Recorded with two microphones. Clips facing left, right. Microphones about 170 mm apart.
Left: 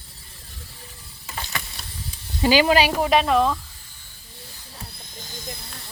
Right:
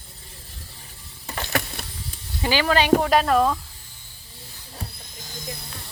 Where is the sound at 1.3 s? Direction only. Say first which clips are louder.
Right 6 dB; 60° right (ahead or behind).